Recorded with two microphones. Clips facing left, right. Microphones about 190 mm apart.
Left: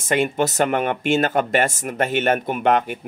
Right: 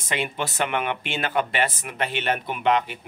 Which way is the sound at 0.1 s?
45° left (ahead or behind).